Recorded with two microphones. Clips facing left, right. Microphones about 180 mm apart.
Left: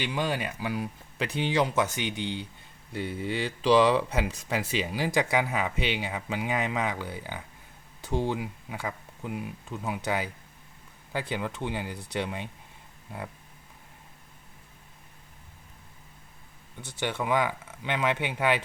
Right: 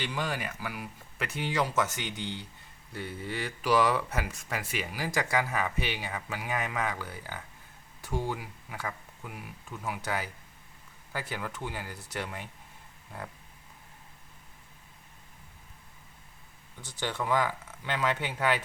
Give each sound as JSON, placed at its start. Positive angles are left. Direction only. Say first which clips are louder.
{"t": 0.0, "sound": "speech", "louder": "left 4 dB", "side_deg": 20}
{"t": 16.8, "sound": "speech", "louder": "left 3 dB", "side_deg": 20}